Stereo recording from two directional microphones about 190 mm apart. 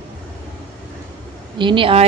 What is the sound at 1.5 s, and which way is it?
Speech, 25° right (ahead or behind).